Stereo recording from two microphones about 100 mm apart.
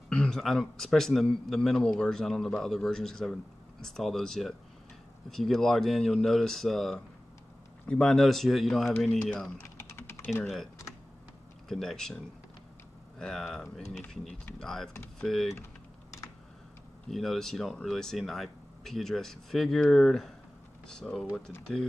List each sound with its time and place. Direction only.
0.1 s a man's voice: 5° left (ahead or behind)
9.6 s typing: 25° left (ahead or behind)
10.4 s a man's voice: centre (ahead or behind)
11.7 s a man's voice: 5° left (ahead or behind)
13.2 s a man's voice: 5° left (ahead or behind)
17.1 s a man's voice: centre (ahead or behind)